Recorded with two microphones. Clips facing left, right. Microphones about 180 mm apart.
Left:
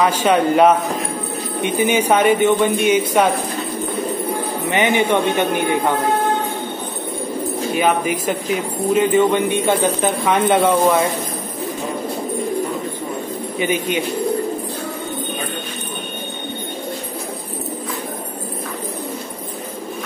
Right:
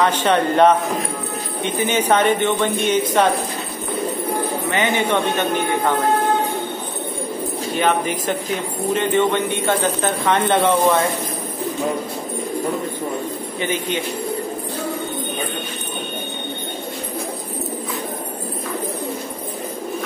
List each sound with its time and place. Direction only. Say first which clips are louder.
0.0 s speech: left 2 dB; 10° left (ahead or behind)
4.6 s speech: left 5 dB; 15° left (ahead or behind)
7.7 s speech: left 1 dB; 10° left (ahead or behind)
13.6 s speech: left 4 dB; 15° left (ahead or behind)